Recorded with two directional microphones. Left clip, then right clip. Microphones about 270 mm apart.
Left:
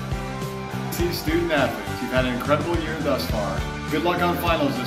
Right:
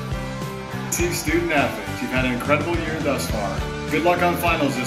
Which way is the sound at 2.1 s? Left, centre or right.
Centre.